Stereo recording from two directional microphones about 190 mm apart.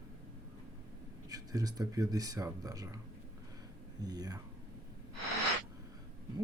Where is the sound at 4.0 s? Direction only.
20° right (ahead or behind).